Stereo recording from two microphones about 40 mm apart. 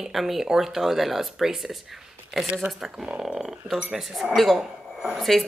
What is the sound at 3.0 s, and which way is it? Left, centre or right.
Speech, right.